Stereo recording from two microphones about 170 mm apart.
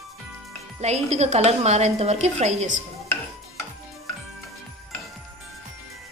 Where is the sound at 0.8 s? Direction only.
40° right (ahead or behind).